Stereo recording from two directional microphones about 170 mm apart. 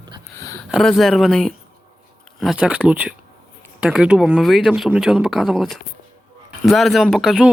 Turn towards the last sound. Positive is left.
turn(degrees=0)  # may be behind; listen again after turning